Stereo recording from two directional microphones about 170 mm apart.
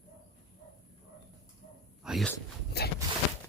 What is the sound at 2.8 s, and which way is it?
Walk, 75° left (ahead or behind).